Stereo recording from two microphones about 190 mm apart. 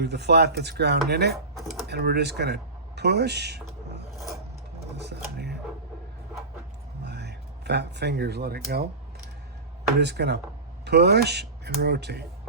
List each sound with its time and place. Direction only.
0.0 s speech: 60° right (ahead or behind)
1.5 s speech: centre (ahead or behind)
1.9 s speech: 55° right (ahead or behind)
4.2 s filing: centre (ahead or behind)
4.9 s a sound: 60° right (ahead or behind)
7.0 s speech: 60° right (ahead or behind)
10.0 s speech: 60° right (ahead or behind)